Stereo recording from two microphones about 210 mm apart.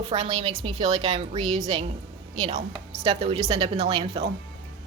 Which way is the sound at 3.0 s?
30° right (ahead or behind).